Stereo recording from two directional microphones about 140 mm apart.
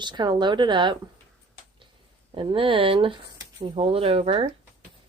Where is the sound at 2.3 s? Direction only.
40° right (ahead or behind).